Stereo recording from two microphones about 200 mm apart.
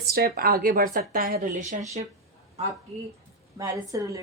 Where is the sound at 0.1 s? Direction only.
50° right (ahead or behind).